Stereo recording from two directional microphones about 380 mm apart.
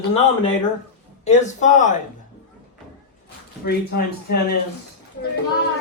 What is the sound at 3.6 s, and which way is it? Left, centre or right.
Speech, left.